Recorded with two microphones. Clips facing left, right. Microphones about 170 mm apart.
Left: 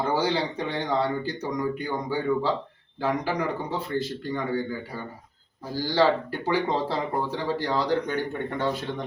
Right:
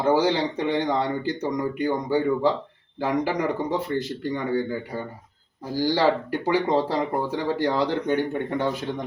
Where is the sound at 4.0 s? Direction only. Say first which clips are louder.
Right 2 dB; 15° right (ahead or behind).